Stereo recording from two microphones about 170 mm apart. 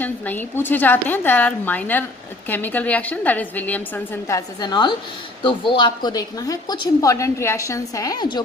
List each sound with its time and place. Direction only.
0.0 s a woman's voice: 10° left (ahead or behind)